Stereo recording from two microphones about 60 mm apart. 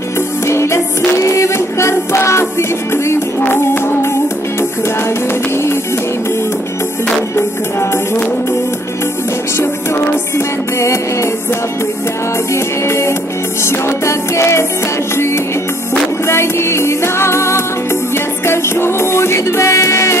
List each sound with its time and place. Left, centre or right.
0.4 s music: left
9.6 s music: left
12.5 s music: left